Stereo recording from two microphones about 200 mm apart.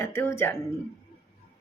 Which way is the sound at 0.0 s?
15° left (ahead or behind).